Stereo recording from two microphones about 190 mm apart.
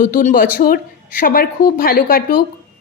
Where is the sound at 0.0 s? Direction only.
40° left (ahead or behind).